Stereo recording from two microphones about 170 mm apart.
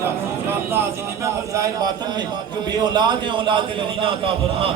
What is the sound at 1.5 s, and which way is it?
A man's voice, 20° right (ahead or behind).